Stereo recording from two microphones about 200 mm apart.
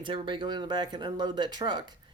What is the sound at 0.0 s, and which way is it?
Speech, 25° right (ahead or behind).